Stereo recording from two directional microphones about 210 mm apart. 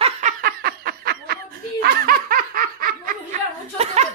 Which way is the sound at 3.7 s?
30° right (ahead or behind).